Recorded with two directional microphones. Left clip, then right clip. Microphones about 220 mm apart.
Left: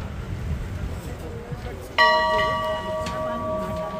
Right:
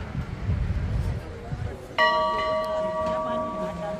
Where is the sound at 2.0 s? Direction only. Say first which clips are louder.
Left 4 dB; 45° left (ahead or behind).